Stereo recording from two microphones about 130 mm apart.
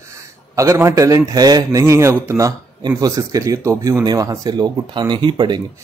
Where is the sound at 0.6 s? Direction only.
25° right (ahead or behind).